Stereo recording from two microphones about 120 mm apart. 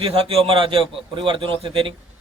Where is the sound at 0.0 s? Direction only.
55° right (ahead or behind).